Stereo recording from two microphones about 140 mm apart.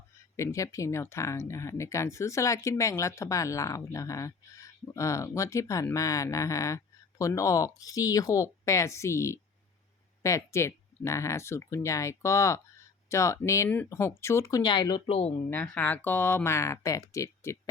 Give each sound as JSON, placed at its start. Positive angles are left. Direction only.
{"t": 0.3, "sound": "speech", "side_deg": 20}
{"t": 15.4, "sound": "speech", "side_deg": 10}